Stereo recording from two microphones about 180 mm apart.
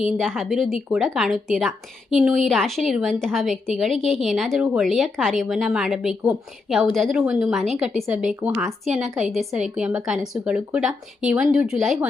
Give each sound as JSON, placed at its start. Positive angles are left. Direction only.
{"t": 0.2, "sound": "a woman's voice", "side_deg": 0}
{"t": 9.3, "sound": "a woman's voice", "side_deg": 0}